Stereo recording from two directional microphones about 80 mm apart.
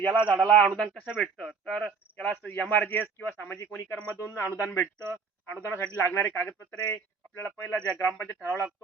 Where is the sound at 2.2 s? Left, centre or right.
Centre.